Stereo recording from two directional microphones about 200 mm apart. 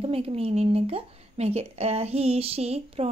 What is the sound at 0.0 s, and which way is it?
A woman's voice, 30° right (ahead or behind).